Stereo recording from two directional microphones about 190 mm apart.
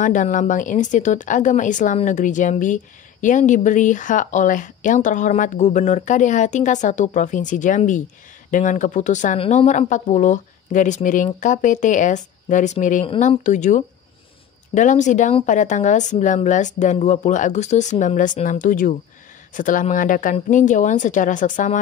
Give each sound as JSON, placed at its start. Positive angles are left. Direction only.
{"t": 0.0, "sound": "a woman's voice", "side_deg": 45}
{"t": 13.0, "sound": "a woman's voice", "side_deg": 30}